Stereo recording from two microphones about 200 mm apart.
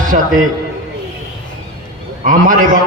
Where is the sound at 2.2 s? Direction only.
40° right (ahead or behind).